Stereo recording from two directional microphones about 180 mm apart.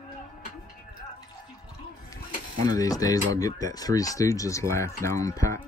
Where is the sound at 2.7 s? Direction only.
20° left (ahead or behind).